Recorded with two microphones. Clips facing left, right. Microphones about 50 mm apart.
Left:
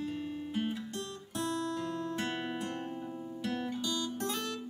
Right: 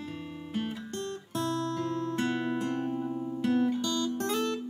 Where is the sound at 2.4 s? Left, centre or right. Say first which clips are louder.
Right 6 dB; right.